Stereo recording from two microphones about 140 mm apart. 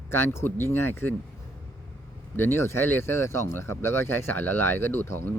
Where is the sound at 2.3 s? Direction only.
15° left (ahead or behind).